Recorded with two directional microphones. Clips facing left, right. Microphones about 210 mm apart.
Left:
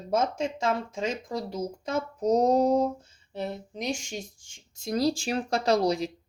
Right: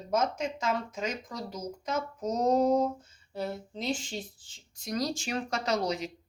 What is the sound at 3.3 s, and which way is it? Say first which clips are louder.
Speech: left 1 dB; 20° left (ahead or behind).